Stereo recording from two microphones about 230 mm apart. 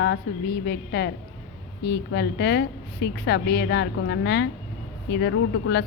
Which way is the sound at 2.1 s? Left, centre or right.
Left.